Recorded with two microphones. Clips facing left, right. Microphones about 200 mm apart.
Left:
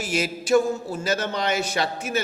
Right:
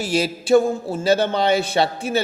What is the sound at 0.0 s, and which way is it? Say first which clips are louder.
A man's voice: right 5 dB; 30° right (ahead or behind).